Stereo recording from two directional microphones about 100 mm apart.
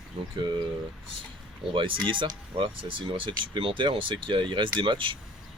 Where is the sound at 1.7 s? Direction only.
55° right (ahead or behind).